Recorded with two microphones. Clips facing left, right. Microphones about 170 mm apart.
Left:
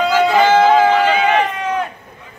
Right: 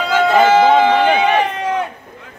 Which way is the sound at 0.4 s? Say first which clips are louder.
Right 2 dB; 15° right (ahead or behind).